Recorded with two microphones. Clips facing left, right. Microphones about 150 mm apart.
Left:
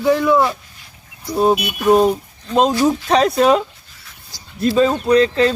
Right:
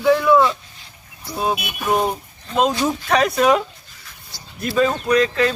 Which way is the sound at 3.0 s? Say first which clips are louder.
Even; 30° left (ahead or behind).